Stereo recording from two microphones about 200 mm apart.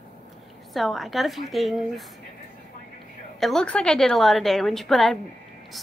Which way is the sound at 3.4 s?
5° left (ahead or behind).